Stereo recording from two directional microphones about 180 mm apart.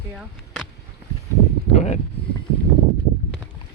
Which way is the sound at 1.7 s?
40° left (ahead or behind).